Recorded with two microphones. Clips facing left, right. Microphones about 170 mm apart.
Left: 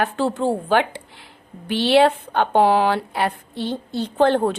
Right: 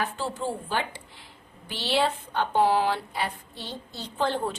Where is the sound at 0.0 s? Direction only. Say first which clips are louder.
Left 9 dB; 65° left (ahead or behind).